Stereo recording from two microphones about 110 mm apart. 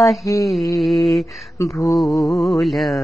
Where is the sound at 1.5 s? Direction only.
25° left (ahead or behind).